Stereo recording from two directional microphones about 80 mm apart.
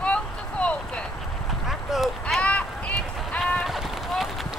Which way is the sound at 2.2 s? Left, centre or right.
Centre.